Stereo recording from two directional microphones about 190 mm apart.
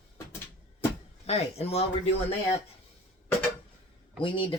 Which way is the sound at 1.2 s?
35° left (ahead or behind).